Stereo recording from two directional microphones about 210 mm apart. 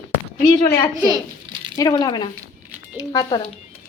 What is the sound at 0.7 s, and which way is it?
Speech, 20° left (ahead or behind).